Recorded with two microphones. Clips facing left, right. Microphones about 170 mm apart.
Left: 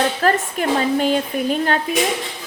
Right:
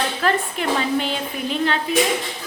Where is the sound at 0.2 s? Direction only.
45° left (ahead or behind).